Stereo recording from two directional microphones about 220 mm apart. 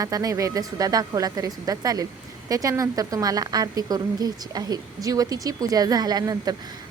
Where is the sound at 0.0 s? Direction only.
15° right (ahead or behind).